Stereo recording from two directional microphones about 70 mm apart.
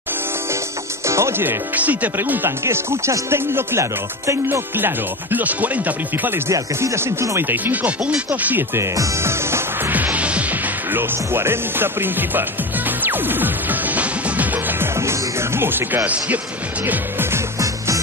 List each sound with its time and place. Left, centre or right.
1.0 s speech: right
1.8 s speech: right
2.6 s music: right
6.5 s music: right
7.5 s speech: right
8.7 s speech: right
9.2 s music: right
15.0 s music: right
17.6 s music: right